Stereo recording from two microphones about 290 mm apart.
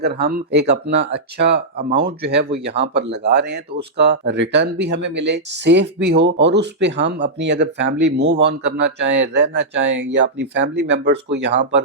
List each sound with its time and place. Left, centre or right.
0.0 s speech: right